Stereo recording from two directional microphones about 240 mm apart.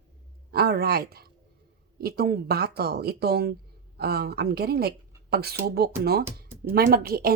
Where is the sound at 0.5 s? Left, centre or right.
Right.